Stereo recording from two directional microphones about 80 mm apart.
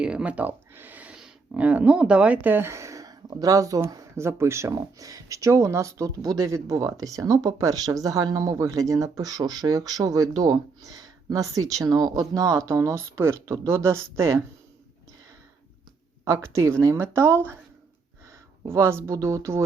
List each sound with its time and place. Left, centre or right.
0.0 s a sound: centre
1.5 s speech: centre; by 14.4 s right
16.2 s speech: right
18.7 s speech: right
19.1 s speech: right